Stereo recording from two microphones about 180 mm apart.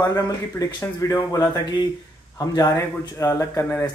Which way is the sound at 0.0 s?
20° left (ahead or behind).